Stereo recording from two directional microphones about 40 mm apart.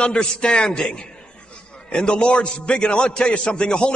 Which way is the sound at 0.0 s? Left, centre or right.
Left.